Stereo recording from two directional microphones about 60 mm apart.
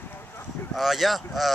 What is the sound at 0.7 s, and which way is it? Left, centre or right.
Speech, centre.